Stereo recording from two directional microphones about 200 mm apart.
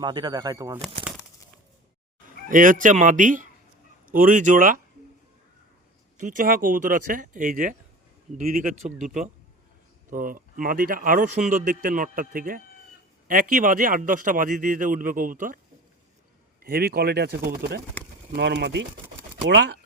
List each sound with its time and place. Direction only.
0.0 s speech: 20° right (ahead or behind)
2.5 s a man's voice: 40° right (ahead or behind)
6.1 s a man's voice: 40° right (ahead or behind)
16.6 s speech: 50° right (ahead or behind)